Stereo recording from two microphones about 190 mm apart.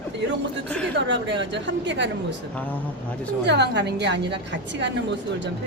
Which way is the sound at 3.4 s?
65° right (ahead or behind).